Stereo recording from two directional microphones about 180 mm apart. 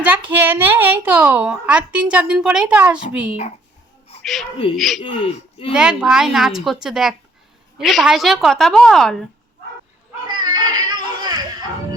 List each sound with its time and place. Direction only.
0.3 s a woman's voice: 10° right (ahead or behind)
10.2 s baby cry: 25° right (ahead or behind)